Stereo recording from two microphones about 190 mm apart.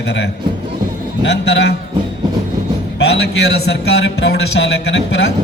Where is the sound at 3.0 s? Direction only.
60° left (ahead or behind).